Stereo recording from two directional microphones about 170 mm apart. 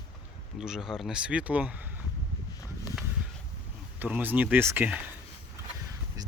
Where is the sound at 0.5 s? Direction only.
5° right (ahead or behind).